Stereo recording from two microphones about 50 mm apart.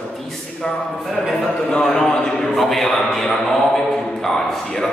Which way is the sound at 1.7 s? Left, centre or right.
Centre.